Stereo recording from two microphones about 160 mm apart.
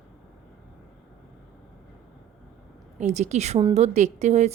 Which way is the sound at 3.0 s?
45° right (ahead or behind).